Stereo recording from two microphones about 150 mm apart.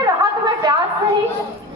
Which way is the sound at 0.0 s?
30° right (ahead or behind).